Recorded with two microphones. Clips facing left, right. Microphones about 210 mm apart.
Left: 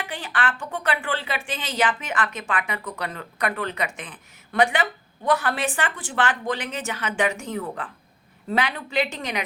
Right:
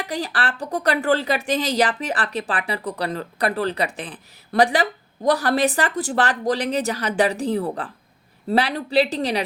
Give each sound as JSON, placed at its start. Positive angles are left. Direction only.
{"t": 0.0, "sound": "speech", "side_deg": -40}